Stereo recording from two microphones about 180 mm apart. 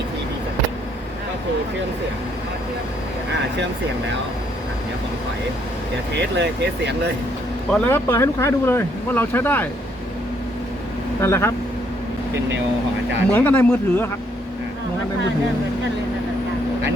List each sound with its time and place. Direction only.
6.1 s speech: 70° right (ahead or behind)
7.7 s speech: 10° left (ahead or behind)
11.2 s speech: 15° left (ahead or behind)
13.3 s speech: 10° left (ahead or behind)